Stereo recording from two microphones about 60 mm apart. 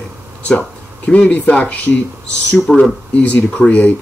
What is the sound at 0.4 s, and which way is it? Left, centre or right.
Speech, left.